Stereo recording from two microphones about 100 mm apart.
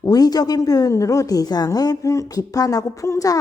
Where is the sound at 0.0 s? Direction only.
40° left (ahead or behind).